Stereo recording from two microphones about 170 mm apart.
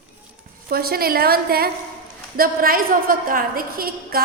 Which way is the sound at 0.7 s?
60° right (ahead or behind).